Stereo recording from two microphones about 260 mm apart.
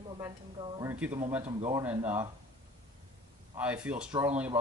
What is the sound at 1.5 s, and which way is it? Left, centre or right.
Speech, centre.